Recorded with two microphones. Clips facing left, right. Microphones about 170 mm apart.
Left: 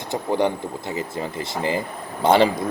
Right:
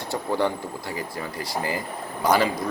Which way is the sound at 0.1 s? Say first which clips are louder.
Left 3 dB; 20° left (ahead or behind).